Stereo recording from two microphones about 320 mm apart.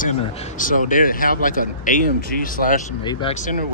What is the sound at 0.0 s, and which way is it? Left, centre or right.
A man's voice, left.